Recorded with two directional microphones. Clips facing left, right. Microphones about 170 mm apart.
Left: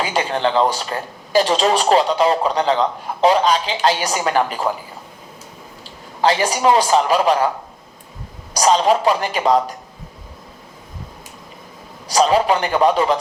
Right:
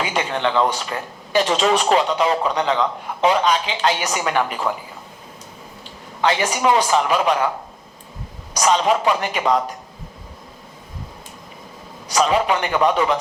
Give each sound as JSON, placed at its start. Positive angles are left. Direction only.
{"t": 0.0, "sound": "speech", "side_deg": 35}
{"t": 6.2, "sound": "speech", "side_deg": 35}
{"t": 8.5, "sound": "speech", "side_deg": 35}
{"t": 12.0, "sound": "speech", "side_deg": 35}